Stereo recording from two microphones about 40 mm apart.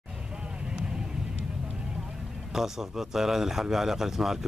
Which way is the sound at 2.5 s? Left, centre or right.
Centre.